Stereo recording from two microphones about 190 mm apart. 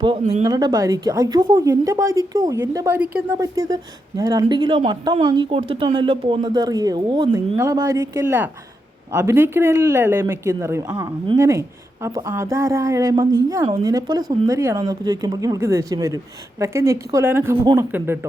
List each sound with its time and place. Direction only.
0.0 s speech: 30° right (ahead or behind)
0.4 s a woman's voice: 20° right (ahead or behind)